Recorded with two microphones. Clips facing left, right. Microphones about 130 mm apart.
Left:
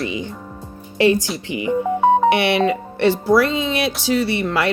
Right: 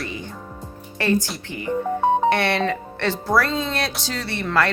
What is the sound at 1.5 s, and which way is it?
Speech, 90° left.